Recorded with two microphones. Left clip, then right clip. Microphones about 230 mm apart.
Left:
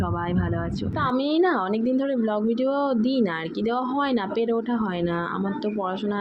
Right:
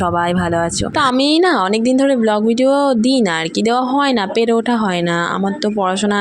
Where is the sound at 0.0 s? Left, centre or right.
Right.